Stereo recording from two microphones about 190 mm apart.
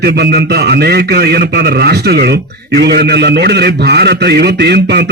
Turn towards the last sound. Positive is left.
turn(degrees=-60)  # may be behind; listen again after turning